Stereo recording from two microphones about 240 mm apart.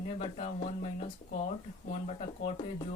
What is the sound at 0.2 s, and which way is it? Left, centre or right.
Speech, left.